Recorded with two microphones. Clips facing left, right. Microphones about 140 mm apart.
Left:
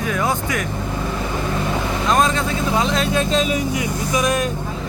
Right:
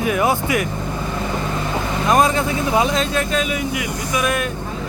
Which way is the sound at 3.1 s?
25° left (ahead or behind).